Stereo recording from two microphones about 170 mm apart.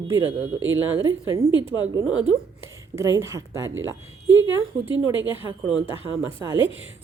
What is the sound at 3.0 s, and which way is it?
A woman's voice, 15° right (ahead or behind).